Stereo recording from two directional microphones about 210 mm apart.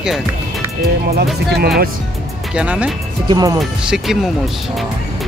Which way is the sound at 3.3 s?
15° right (ahead or behind).